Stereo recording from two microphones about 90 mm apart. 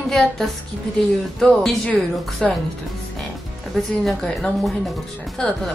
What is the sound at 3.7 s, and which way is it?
A woman's voice, 5° left (ahead or behind).